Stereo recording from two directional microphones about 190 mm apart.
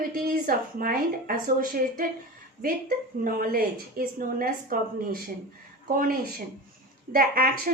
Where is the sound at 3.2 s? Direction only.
50° right (ahead or behind).